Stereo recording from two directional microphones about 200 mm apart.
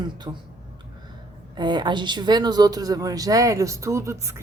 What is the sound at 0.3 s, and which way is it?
Speech, 20° right (ahead or behind).